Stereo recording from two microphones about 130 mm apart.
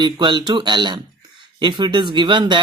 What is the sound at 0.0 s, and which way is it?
Speech, 35° right (ahead or behind).